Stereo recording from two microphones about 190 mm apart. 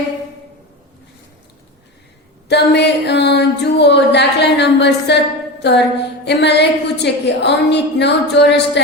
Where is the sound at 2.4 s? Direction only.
60° left (ahead or behind).